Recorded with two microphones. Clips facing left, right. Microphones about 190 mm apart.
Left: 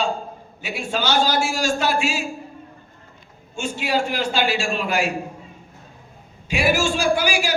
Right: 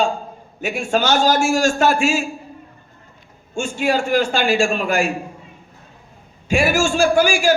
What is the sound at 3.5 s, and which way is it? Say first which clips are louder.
A man's voice: right 4 dB; 50° right (ahead or behind).